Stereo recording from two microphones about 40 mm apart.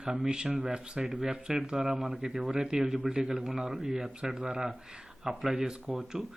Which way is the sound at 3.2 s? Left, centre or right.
Centre.